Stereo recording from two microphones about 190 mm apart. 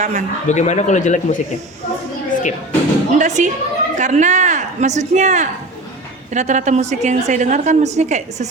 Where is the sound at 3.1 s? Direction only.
40° right (ahead or behind).